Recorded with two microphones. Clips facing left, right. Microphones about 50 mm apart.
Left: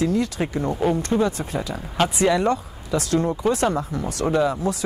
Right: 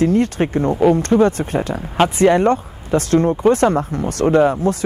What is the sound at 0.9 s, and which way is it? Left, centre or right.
Speech, right.